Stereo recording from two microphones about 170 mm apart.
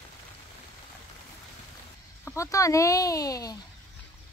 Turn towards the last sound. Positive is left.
turn(degrees=20)  # may be behind; listen again after turning